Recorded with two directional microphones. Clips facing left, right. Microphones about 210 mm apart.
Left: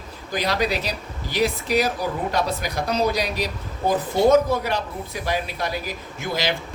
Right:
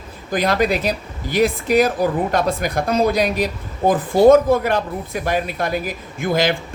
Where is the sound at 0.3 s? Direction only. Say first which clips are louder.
Right 5 dB; 50° right (ahead or behind).